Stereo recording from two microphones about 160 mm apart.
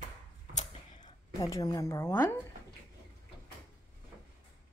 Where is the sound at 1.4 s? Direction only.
20° left (ahead or behind).